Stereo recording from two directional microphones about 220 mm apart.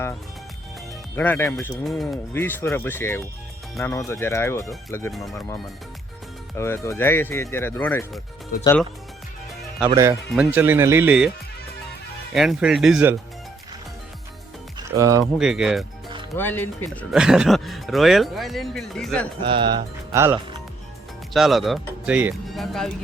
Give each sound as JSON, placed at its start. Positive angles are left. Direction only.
{"t": 1.1, "sound": "speech", "side_deg": 10}
{"t": 6.6, "sound": "speech", "side_deg": 10}
{"t": 9.8, "sound": "speech", "side_deg": -10}
{"t": 12.3, "sound": "speech", "side_deg": 0}
{"t": 14.8, "sound": "music", "side_deg": -15}
{"t": 15.2, "sound": "speech", "side_deg": 0}
{"t": 16.4, "sound": "speech", "side_deg": 10}
{"t": 19.4, "sound": "speech", "side_deg": -20}
{"t": 21.3, "sound": "speech", "side_deg": 0}